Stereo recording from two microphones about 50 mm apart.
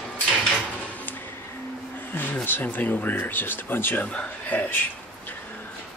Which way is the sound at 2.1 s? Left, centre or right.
Left.